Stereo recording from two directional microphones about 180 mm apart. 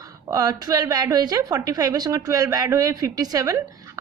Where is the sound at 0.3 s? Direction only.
20° right (ahead or behind).